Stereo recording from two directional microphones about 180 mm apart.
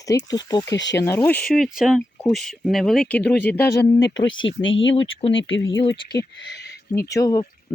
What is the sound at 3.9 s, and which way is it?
Speech, 80° left.